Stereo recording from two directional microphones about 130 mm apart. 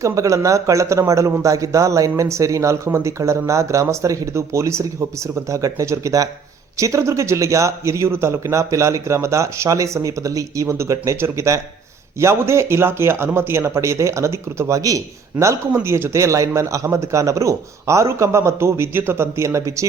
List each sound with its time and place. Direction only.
0.0 s speech: 25° right (ahead or behind)